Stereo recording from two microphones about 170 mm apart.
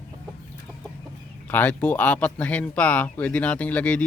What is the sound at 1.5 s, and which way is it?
Speech, 10° left (ahead or behind).